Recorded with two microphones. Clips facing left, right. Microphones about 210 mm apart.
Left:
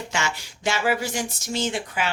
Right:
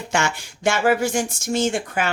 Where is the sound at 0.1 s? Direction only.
55° right (ahead or behind).